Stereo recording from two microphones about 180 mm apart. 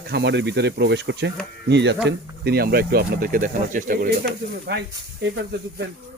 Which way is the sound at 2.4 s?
60° right (ahead or behind).